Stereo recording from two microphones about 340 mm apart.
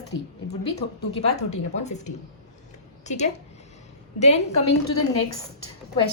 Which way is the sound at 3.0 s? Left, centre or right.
Centre.